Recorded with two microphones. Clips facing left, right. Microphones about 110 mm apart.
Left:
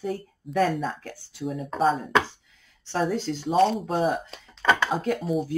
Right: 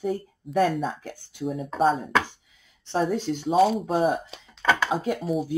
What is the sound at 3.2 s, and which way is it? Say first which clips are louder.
Speech: right 2 dB; 20° right (ahead or behind).